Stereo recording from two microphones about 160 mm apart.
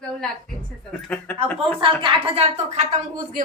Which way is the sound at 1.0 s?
5° left (ahead or behind).